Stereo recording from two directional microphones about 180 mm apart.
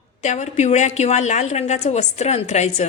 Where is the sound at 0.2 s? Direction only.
40° left (ahead or behind).